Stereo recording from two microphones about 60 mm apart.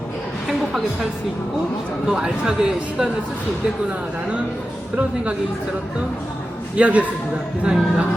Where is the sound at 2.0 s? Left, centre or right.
Centre.